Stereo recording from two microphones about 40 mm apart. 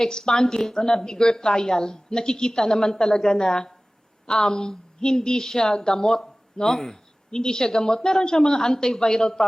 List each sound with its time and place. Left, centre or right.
0.0 s speech: centre